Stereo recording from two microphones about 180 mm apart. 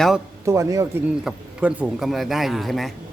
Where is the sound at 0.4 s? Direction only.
15° right (ahead or behind).